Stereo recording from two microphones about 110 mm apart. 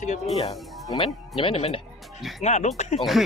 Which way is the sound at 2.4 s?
90° left.